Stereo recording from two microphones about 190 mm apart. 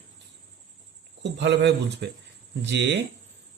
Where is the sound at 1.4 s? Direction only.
65° right (ahead or behind).